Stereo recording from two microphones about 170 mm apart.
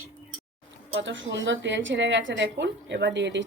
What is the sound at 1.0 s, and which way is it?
A woman's voice, 90° right.